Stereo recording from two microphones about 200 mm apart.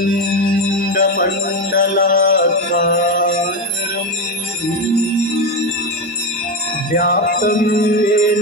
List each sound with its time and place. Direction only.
0.5 s music: 45° left (ahead or behind)
6.9 s music: 45° left (ahead or behind)